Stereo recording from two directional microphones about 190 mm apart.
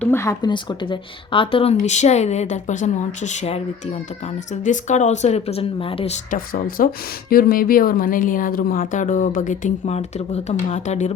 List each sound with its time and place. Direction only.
0.0 s speech: 15° left (ahead or behind); by 3.6 s 35° left (ahead or behind)
4.6 s speech: 40° left (ahead or behind)
6.3 s speech: 50° left (ahead or behind)